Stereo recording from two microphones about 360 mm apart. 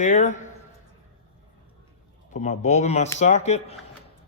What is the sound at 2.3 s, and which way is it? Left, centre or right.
Speech, centre.